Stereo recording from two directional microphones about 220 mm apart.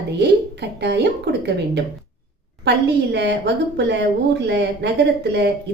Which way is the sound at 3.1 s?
50° right (ahead or behind).